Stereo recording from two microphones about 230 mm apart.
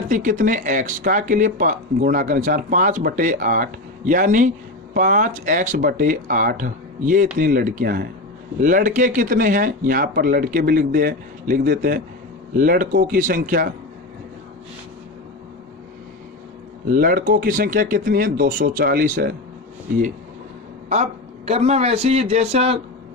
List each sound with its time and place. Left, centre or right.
0.1 s speech: right
16.9 s speech: right
20.9 s speech: right